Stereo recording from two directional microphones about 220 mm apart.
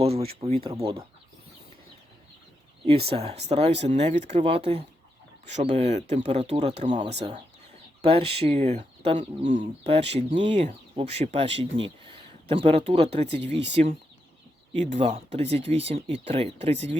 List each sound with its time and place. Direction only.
0.0 s speech: 25° right (ahead or behind)
3.1 s speech: 25° right (ahead or behind)
7.2 s speech: 20° right (ahead or behind)
13.1 s speech: 50° right (ahead or behind)
14.7 s speech: 30° right (ahead or behind)